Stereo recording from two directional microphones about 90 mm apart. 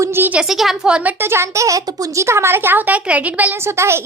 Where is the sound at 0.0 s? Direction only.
25° right (ahead or behind).